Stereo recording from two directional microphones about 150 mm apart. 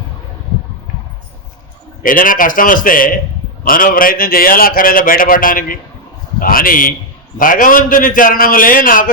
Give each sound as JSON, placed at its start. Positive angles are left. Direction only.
{"t": 2.0, "sound": "a man's voice", "side_deg": 65}